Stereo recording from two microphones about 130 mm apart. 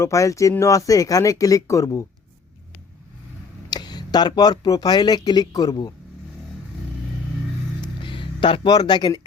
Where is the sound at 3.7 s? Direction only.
30° left (ahead or behind).